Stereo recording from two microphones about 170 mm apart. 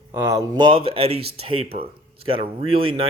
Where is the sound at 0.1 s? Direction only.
20° right (ahead or behind).